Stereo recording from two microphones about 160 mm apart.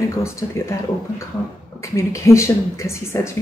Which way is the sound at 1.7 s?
20° left (ahead or behind).